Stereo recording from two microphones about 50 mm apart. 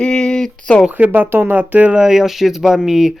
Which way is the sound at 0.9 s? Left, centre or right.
Right.